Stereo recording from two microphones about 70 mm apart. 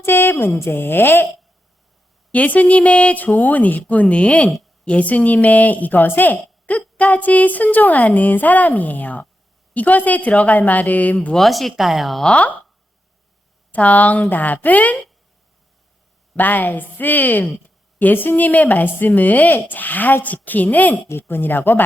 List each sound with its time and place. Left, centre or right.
0.0 s speech: left
2.3 s a woman's voice: left
11.3 s speech: centre
12.2 s speech: centre
13.7 s a woman's voice: left
16.4 s a woman's voice: left